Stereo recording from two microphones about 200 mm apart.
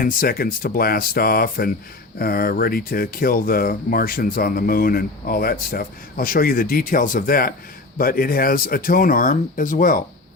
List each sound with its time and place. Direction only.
0.0 s speech: 45° left (ahead or behind)